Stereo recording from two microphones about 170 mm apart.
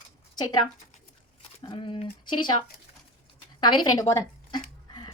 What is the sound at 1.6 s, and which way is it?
Speech, 30° left (ahead or behind).